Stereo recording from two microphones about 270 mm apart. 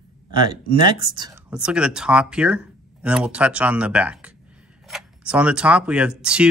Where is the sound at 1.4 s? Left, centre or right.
Centre.